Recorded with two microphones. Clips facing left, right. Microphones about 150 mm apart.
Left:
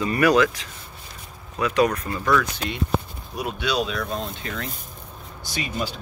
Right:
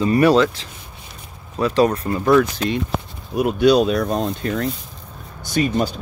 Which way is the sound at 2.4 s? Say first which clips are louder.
Right 7 dB; 45° right (ahead or behind).